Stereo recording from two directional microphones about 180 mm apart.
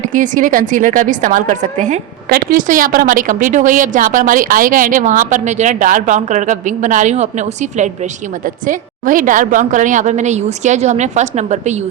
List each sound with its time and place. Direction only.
0.0 s a woman's voice: 45° right (ahead or behind)